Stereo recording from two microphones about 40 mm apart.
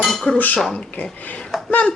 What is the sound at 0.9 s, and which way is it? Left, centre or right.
Speech, left.